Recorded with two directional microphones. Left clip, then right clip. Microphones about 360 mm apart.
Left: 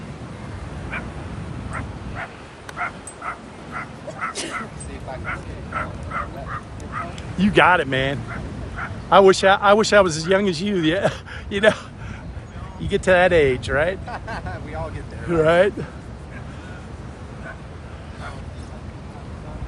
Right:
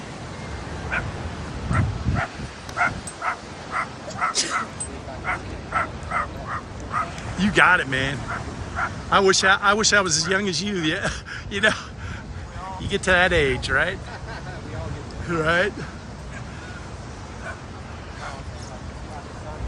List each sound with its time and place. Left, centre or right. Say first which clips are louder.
0.9 s duck: right 4 dB; right
1.7 s dog: right 6 dB; right
3.8 s dog: right 4 dB; centre
5.2 s bow-wow: right 6 dB; centre
7.3 s speech: left 2 dB; centre
12.9 s speech: left 3 dB; centre
15.3 s speech: left 5 dB; centre